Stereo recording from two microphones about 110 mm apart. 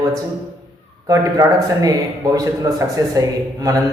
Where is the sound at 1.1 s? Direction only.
30° right (ahead or behind).